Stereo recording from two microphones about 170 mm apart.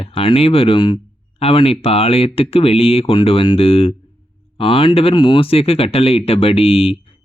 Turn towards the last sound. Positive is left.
turn(degrees=35)  # may be behind; listen again after turning